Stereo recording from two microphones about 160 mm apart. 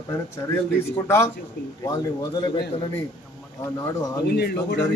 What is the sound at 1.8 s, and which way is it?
Speech, 25° left (ahead or behind).